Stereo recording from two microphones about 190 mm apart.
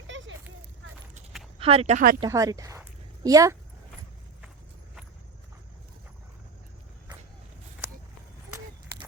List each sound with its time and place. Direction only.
0.1 s a sound: 85° right
1.5 s speech: 30° right (ahead or behind)
2.2 s speech: 20° right (ahead or behind)